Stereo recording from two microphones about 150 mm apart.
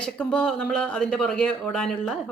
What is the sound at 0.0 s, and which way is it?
Speech, 5° left (ahead or behind).